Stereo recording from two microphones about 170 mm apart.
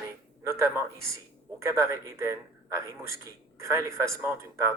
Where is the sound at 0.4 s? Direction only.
15° right (ahead or behind).